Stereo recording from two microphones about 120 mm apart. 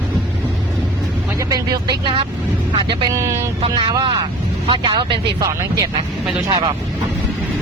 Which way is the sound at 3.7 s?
40° right (ahead or behind).